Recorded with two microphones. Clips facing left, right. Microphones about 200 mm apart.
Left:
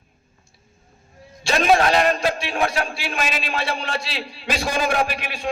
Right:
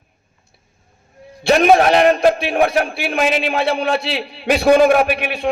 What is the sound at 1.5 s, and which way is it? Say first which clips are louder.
A man's voice: right 6 dB; 60° right (ahead or behind).